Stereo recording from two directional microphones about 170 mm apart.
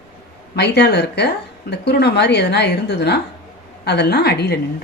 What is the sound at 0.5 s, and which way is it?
Speech, 80° left.